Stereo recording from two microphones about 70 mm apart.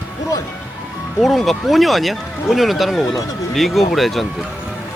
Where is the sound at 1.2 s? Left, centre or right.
Centre.